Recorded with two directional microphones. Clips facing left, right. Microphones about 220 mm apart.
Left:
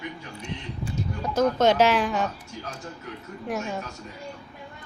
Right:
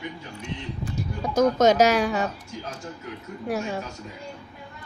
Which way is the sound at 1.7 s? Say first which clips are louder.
Right 2 dB; 40° right (ahead or behind).